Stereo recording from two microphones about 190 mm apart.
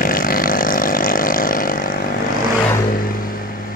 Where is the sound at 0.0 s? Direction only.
50° left (ahead or behind).